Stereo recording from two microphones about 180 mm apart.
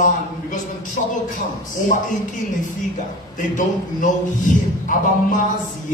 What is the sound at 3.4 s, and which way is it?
A man's voice, 45° left (ahead or behind).